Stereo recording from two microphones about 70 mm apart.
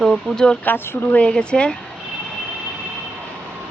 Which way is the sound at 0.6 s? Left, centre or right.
Left.